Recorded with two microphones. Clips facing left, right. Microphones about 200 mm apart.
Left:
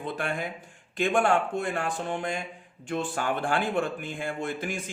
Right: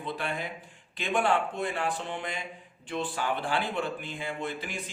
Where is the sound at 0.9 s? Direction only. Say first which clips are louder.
Left 3 dB; 50° left (ahead or behind).